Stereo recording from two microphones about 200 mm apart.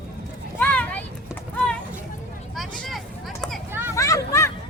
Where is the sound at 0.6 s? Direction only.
10° left (ahead or behind).